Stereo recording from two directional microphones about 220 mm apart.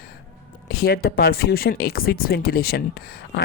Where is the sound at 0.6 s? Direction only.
45° left (ahead or behind).